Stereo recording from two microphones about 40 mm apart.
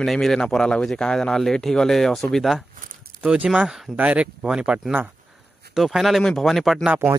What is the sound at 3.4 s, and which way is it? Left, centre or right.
Speech, centre.